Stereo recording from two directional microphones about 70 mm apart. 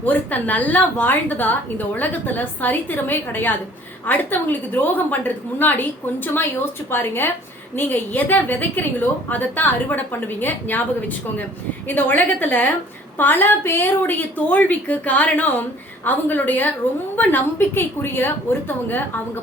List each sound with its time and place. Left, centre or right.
0.0 s a woman's voice: left
11.9 s a woman's voice: left